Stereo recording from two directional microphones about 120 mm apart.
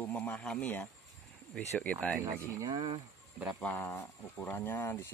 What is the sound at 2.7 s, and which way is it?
Speech, 45° right (ahead or behind).